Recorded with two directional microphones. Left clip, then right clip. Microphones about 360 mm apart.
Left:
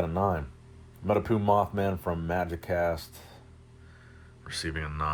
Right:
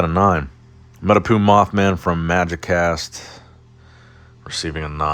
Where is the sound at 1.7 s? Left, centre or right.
Right.